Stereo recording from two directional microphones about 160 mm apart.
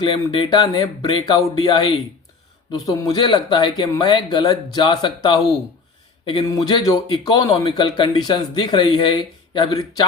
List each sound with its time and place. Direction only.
0.0 s speech: 30° left (ahead or behind)